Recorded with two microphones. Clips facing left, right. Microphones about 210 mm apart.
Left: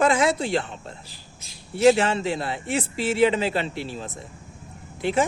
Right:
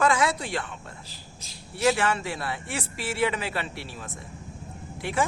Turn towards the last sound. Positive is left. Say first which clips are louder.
# left 5 dB
turn(degrees=25)  # may be behind; listen again after turning